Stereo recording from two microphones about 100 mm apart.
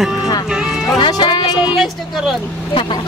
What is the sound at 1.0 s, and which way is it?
Music, 55° left (ahead or behind).